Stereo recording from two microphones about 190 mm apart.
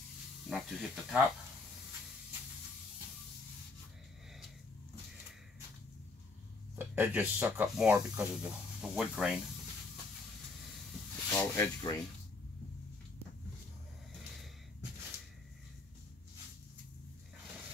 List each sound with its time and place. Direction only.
0.5 s speech: centre (ahead or behind)
6.7 s speech: 10° right (ahead or behind)
11.3 s speech: 15° left (ahead or behind)